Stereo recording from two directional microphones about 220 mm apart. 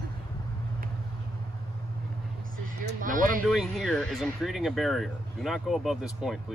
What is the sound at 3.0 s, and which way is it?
Speech, 35° right (ahead or behind).